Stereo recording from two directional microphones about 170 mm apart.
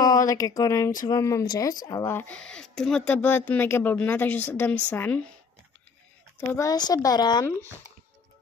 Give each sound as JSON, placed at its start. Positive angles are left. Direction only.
{"t": 0.0, "sound": "speech", "side_deg": 20}
{"t": 6.5, "sound": "speech", "side_deg": 20}